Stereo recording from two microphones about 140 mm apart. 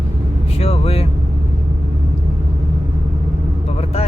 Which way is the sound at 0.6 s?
45° left (ahead or behind).